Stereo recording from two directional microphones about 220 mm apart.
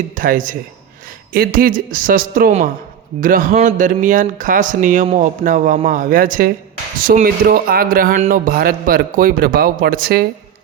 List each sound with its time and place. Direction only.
0.2 s speech: 35° right (ahead or behind)